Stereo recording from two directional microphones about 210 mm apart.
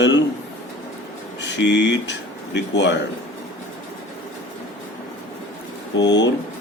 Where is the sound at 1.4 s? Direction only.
55° left (ahead or behind).